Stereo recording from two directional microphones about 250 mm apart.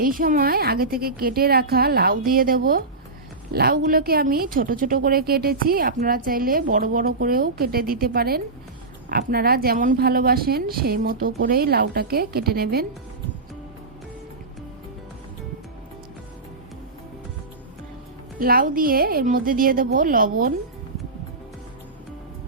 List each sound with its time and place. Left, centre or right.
0.0 s a woman's voice: right
18.3 s a woman's voice: right